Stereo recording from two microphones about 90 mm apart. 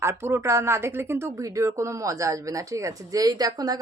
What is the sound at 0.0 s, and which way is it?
Speech, 30° right (ahead or behind).